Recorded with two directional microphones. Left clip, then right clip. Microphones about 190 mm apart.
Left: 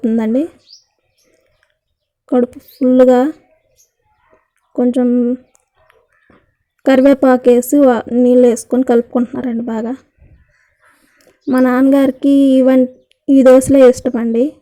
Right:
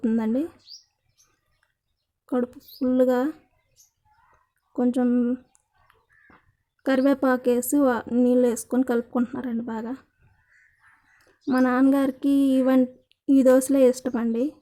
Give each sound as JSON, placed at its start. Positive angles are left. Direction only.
{"t": 0.2, "sound": "speech", "side_deg": 15}
{"t": 2.2, "sound": "speech", "side_deg": 15}
{"t": 4.3, "sound": "a sound", "side_deg": 10}
{"t": 6.8, "sound": "speech", "side_deg": 15}
{"t": 11.2, "sound": "a sound", "side_deg": 5}
{"t": 11.6, "sound": "speech", "side_deg": 15}